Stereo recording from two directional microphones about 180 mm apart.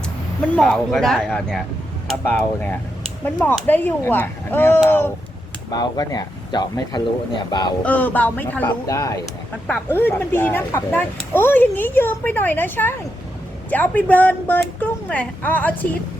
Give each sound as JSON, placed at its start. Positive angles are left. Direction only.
{"t": 0.5, "sound": "speech", "side_deg": 5}
{"t": 7.8, "sound": "speech", "side_deg": 10}